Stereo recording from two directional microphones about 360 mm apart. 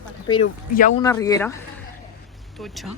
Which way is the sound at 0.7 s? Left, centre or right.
Left.